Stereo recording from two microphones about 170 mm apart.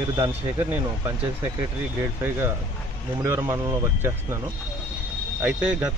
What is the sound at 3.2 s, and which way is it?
Speech, 15° right (ahead or behind).